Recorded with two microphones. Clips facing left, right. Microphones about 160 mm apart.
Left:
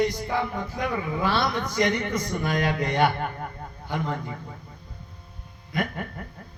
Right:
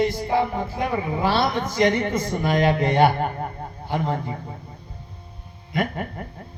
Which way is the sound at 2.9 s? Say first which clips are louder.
Right 5 dB; 45° right (ahead or behind).